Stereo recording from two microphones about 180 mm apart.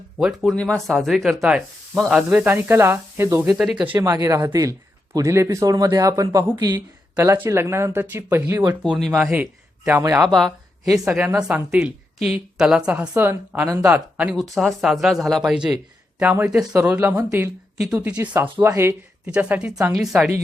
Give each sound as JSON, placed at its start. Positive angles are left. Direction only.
{"t": 0.2, "sound": "speech", "side_deg": 0}
{"t": 3.6, "sound": "speech", "side_deg": -5}
{"t": 8.8, "sound": "speech", "side_deg": 0}
{"t": 10.2, "sound": "speech", "side_deg": 0}
{"t": 11.0, "sound": "speech", "side_deg": -10}
{"t": 17.8, "sound": "speech", "side_deg": -5}